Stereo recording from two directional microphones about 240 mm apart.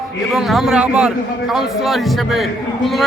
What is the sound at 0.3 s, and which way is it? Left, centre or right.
Speech, centre.